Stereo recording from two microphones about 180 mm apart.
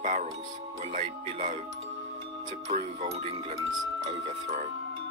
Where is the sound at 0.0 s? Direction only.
45° right (ahead or behind).